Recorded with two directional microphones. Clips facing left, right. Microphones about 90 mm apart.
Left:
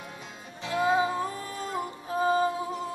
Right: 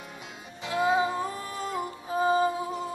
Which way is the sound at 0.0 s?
5° right (ahead or behind).